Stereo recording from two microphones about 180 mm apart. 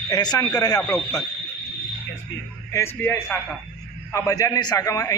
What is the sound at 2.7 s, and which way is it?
A man's voice, 15° left (ahead or behind).